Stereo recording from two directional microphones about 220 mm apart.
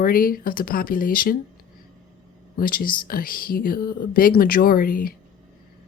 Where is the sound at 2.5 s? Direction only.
40° left (ahead or behind).